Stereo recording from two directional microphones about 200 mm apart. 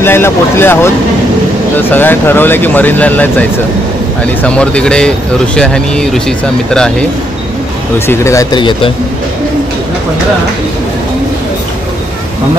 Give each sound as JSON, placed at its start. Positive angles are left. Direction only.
{"t": 0.0, "sound": "speech", "side_deg": 10}
{"t": 8.1, "sound": "speech", "side_deg": 15}